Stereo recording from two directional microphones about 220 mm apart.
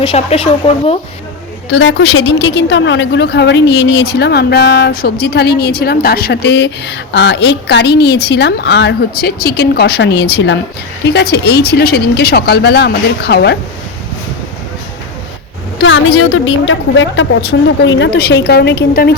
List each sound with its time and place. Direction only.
0.0 s speech: 25° left (ahead or behind)
1.7 s a woman's voice: 55° left (ahead or behind)
15.8 s a woman's voice: 65° left (ahead or behind); by 19.1 s 45° left (ahead or behind)